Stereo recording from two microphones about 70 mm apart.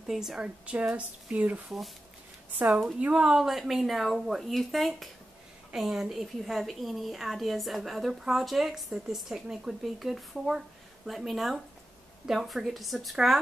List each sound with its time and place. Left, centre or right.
0.1 s a woman's voice: centre
0.7 s speech: centre
3.0 s a woman's voice: centre